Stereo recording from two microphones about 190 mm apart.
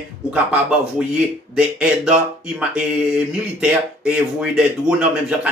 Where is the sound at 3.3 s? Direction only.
5° right (ahead or behind).